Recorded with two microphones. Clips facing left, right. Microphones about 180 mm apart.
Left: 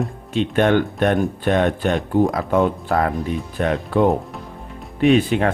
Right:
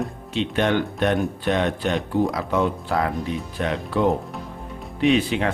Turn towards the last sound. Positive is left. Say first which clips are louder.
# left 4 dB
turn(degrees=50)  # may be behind; listen again after turning